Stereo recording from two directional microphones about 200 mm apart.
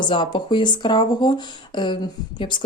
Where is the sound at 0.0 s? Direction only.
25° left (ahead or behind).